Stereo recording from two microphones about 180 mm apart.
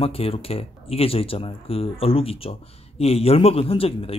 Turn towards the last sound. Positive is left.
turn(degrees=30)  # may be behind; listen again after turning